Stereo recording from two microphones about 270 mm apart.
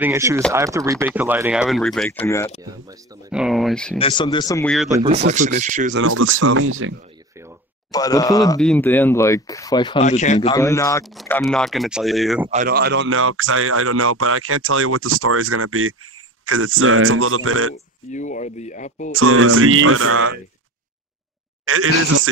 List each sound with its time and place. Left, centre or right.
0.0 s speech: centre
2.6 s speech: centre
3.3 s speech: centre
4.0 s speech: centre
4.9 s speech: centre
5.9 s speech: right
7.9 s speech: centre
10.5 s speech: centre
12.4 s speech: right
18.1 s speech: left
19.1 s speech: right
21.6 s speech: right